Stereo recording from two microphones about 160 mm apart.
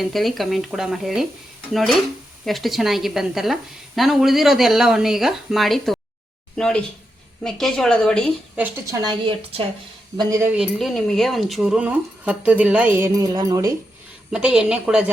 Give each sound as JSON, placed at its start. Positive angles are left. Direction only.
{"t": 0.0, "sound": "a woman's voice", "side_deg": 0}
{"t": 8.5, "sound": "a woman's voice", "side_deg": -10}
{"t": 9.0, "sound": "a woman's voice", "side_deg": -30}
{"t": 10.2, "sound": "speech", "side_deg": -20}
{"t": 10.5, "sound": "a woman's voice", "side_deg": 0}
{"t": 13.1, "sound": "speech", "side_deg": -25}
{"t": 14.3, "sound": "a woman's voice", "side_deg": -5}